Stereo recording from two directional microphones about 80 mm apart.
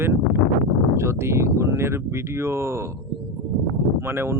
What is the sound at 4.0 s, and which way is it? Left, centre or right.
Speech, right.